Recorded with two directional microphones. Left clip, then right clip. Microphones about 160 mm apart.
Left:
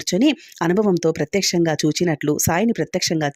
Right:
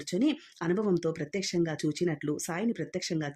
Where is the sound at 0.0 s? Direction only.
50° left (ahead or behind).